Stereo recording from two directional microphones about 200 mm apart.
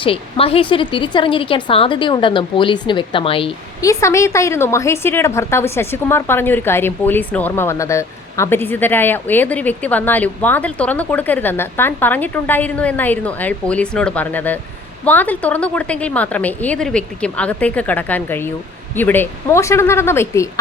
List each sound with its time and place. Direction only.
0.0 s speech: 30° left (ahead or behind)
3.8 s a woman's voice: 15° left (ahead or behind)